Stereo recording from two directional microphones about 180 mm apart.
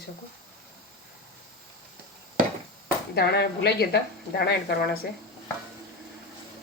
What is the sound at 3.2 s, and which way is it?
Speech, 65° left (ahead or behind).